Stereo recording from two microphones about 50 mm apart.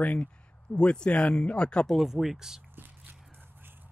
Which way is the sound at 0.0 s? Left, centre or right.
Left.